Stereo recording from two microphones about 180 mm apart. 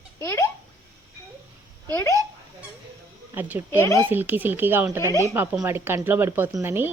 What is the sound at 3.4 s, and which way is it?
Speech, 10° right (ahead or behind).